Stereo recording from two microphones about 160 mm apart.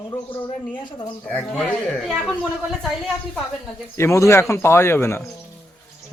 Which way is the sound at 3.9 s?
15° left (ahead or behind).